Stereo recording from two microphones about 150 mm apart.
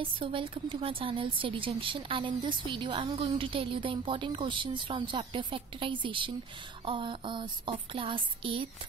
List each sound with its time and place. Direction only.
0.0 s a woman's voice: 35° right (ahead or behind)